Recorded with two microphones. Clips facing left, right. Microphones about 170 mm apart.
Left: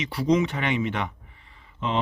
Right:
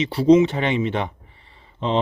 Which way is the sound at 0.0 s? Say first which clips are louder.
Right 8 dB; 30° right (ahead or behind).